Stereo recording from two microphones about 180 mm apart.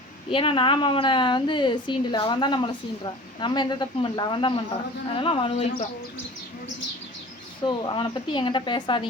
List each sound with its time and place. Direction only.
0.3 s a woman's voice: 30° left (ahead or behind)
7.6 s a woman's voice: 25° left (ahead or behind)